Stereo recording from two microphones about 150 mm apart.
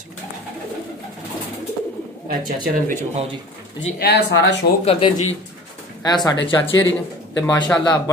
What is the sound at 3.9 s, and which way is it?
Speech, 90° left.